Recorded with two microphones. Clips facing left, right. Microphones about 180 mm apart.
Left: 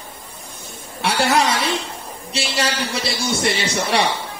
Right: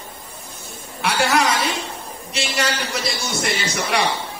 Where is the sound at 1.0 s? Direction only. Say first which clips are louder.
Left 1 dB; 30° left (ahead or behind).